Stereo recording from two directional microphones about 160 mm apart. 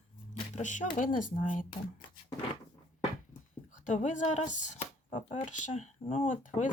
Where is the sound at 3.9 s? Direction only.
50° left (ahead or behind).